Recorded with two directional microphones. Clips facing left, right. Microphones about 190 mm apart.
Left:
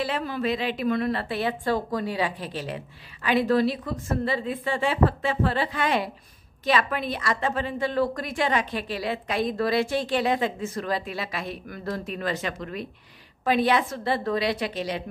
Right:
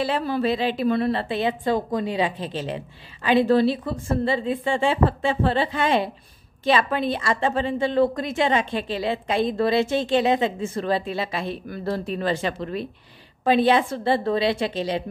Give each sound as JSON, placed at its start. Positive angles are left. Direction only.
{"t": 0.0, "sound": "a woman's voice", "side_deg": -30}